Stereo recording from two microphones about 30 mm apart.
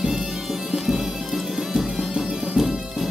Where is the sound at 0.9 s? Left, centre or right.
Centre.